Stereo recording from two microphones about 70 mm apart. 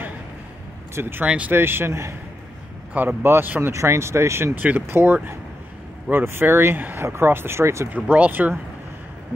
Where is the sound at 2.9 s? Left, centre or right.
Right.